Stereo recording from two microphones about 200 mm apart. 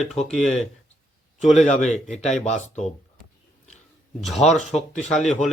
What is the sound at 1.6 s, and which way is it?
Speech, 35° left (ahead or behind).